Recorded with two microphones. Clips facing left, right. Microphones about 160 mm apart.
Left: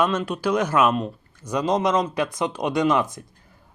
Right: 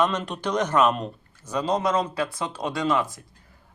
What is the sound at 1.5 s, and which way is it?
Speech, 15° left (ahead or behind).